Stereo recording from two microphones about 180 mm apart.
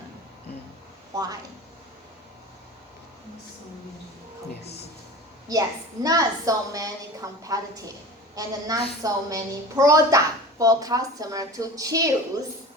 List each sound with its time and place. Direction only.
1.1 s a woman's voice: 20° right (ahead or behind)
5.5 s a woman's voice: 20° right (ahead or behind)